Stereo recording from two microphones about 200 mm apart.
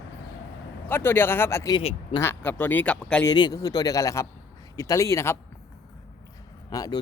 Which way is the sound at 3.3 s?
20° left (ahead or behind).